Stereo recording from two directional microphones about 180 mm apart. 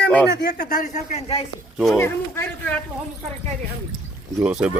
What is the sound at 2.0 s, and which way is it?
Speech, 15° left (ahead or behind).